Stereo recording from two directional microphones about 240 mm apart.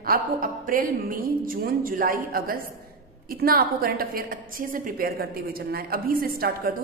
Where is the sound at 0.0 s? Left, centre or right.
Right.